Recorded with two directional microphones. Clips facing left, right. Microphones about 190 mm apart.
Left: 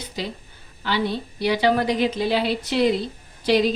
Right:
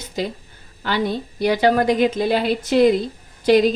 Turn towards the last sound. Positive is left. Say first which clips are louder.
# right 5 dB
turn(degrees=-50)  # may be behind; listen again after turning